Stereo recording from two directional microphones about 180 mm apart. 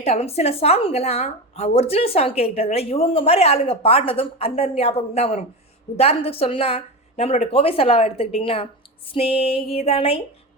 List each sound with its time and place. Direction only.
0.0 s speech: 35° left (ahead or behind)